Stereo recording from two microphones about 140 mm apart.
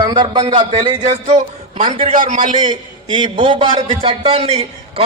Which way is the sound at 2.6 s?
35° right (ahead or behind).